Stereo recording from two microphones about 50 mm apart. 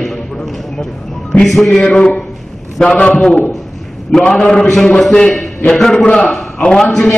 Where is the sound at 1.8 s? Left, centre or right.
Left.